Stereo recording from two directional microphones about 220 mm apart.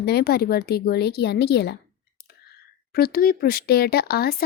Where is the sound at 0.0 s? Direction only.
45° left (ahead or behind).